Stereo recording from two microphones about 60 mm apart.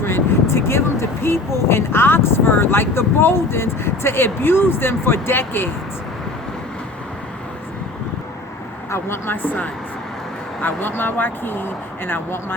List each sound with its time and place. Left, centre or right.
0.0 s speech: left
8.9 s speech: left
9.4 s speech: left